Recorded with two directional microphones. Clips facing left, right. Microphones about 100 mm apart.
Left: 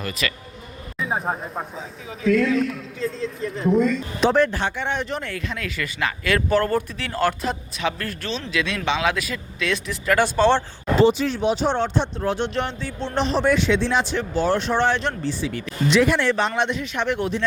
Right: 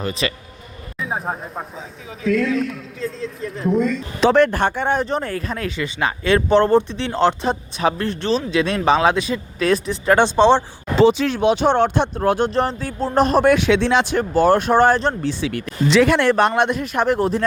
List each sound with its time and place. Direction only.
0.0 s a man's voice: 30° right (ahead or behind)
0.9 s a man's voice: centre (ahead or behind)
4.3 s a man's voice: 65° right (ahead or behind); by 10.6 s 20° right (ahead or behind)
11.0 s speech: 90° right; by 12.5 s 50° right (ahead or behind)
12.5 s speech: 40° right (ahead or behind)
15.2 s speech: 65° right (ahead or behind); by 16.2 s 90° right
16.2 s speech: 55° right (ahead or behind); by 17.4 s 40° right (ahead or behind)